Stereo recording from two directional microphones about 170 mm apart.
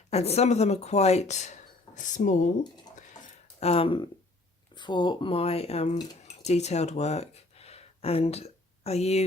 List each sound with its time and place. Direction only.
0.1 s speech: 40° left (ahead or behind)
3.6 s speech: 35° left (ahead or behind)